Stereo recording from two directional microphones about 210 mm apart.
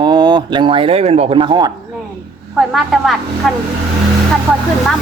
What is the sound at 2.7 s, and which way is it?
Speech, centre (ahead or behind).